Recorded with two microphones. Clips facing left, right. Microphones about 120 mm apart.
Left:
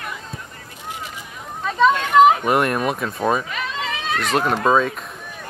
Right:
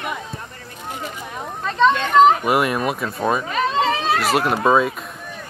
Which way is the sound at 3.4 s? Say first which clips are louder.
Right 8 dB; 35° right (ahead or behind).